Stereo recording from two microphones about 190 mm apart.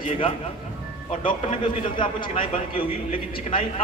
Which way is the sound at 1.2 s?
25° left (ahead or behind).